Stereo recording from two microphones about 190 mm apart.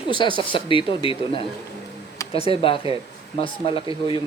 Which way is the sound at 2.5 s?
30° left (ahead or behind).